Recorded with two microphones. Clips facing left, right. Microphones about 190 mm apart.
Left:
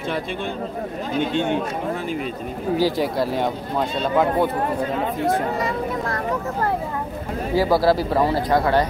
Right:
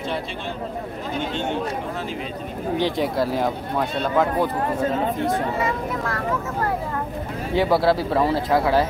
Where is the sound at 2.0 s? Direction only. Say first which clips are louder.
Left 3 dB; 55° left (ahead or behind).